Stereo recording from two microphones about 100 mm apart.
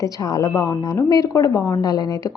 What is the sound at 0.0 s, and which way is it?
A woman's voice, 35° left (ahead or behind).